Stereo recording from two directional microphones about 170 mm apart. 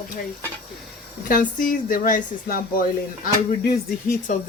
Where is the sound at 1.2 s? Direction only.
55° left (ahead or behind).